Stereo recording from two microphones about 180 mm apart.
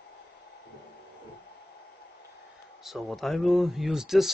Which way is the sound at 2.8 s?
Centre (ahead or behind).